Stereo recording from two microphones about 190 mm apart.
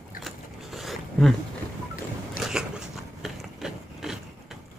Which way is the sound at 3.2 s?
Centre (ahead or behind).